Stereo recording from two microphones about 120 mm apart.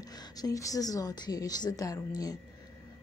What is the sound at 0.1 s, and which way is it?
Speech, 35° left (ahead or behind).